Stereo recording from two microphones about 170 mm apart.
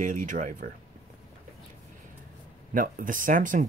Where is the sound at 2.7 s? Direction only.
50° right (ahead or behind).